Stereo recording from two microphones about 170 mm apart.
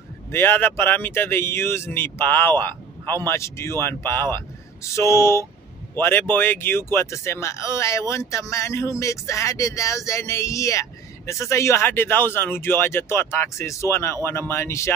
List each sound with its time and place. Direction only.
0.3 s speech: 15° left (ahead or behind)